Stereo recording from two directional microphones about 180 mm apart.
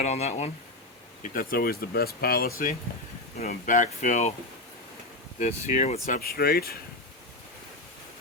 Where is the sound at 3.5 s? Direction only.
45° left (ahead or behind).